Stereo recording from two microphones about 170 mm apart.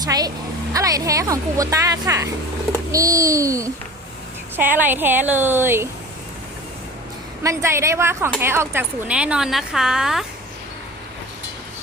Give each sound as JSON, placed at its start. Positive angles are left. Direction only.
{"t": 0.0, "sound": "a woman's voice", "side_deg": -20}
{"t": 7.4, "sound": "speech", "side_deg": -15}